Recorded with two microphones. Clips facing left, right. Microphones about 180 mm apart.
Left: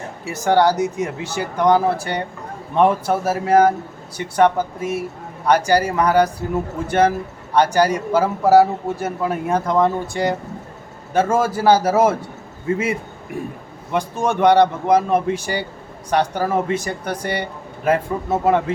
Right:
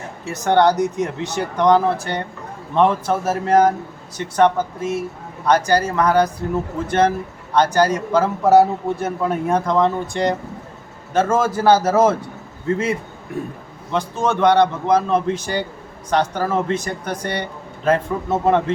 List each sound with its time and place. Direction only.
0.3 s a man's voice: 10° left (ahead or behind)
13.9 s a man's voice: 15° left (ahead or behind)